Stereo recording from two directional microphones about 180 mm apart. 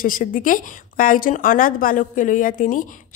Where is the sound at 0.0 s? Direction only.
50° left (ahead or behind).